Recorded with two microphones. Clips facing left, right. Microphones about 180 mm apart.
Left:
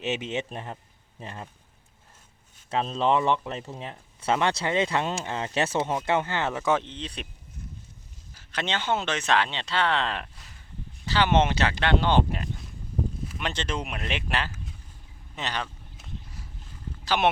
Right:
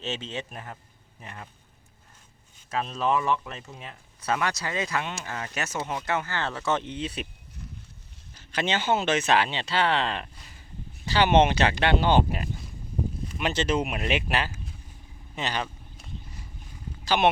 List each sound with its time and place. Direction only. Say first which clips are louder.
0.0 s speech: left 4 dB; 15° left (ahead or behind)
2.6 s speech: left 2 dB; 25° left (ahead or behind)
6.8 s speech: right 5 dB; 10° right (ahead or behind)
8.5 s speech: right 2 dB; 5° right (ahead or behind)
11.0 s speech: right 2 dB; 15° right (ahead or behind)
15.4 s a sound: right 2 dB; 5° right (ahead or behind)